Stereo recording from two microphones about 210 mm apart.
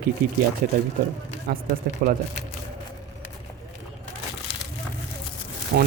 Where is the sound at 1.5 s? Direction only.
50° right (ahead or behind).